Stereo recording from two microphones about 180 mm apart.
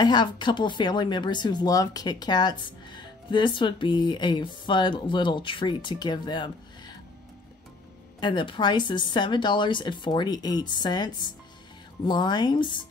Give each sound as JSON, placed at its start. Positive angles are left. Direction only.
{"t": 0.0, "sound": "speech", "side_deg": 25}
{"t": 8.2, "sound": "speech", "side_deg": 25}
{"t": 12.1, "sound": "speech", "side_deg": 25}